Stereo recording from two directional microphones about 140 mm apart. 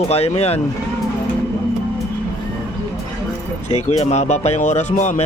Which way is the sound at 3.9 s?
55° left (ahead or behind).